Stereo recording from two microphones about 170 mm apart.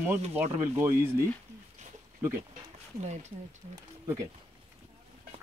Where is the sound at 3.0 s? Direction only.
40° right (ahead or behind).